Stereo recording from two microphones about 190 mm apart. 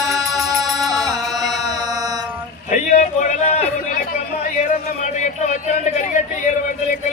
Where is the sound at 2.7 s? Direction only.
40° left (ahead or behind).